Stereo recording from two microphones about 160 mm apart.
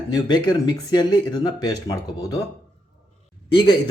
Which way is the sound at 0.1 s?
25° left (ahead or behind).